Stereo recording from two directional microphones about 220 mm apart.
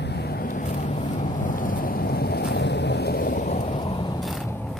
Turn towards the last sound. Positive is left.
turn(degrees=0)  # may be behind; listen again after turning